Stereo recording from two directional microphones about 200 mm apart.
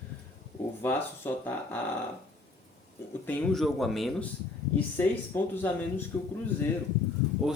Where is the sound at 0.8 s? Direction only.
10° left (ahead or behind).